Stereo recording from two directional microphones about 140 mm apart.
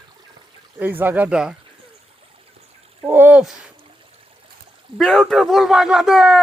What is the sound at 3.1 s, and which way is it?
Speech, 10° right (ahead or behind).